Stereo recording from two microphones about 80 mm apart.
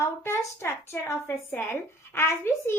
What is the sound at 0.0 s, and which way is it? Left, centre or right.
A woman's voice, left.